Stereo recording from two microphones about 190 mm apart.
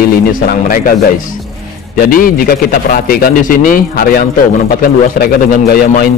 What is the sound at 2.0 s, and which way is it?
A man's voice, 50° left (ahead or behind).